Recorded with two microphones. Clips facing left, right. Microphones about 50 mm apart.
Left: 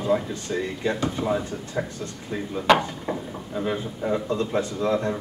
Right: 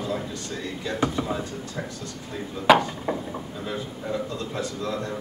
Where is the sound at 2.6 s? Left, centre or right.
Left.